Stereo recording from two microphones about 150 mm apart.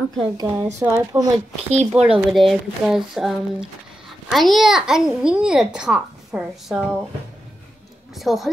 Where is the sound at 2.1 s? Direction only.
Centre (ahead or behind).